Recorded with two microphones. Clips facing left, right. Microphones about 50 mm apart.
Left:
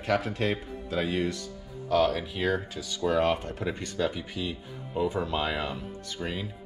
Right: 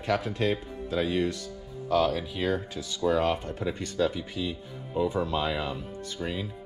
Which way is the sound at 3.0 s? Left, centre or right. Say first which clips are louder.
Even; left.